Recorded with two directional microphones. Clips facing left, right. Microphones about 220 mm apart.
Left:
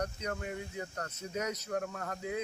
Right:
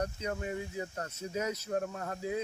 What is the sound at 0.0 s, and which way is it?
Speech, 25° right (ahead or behind).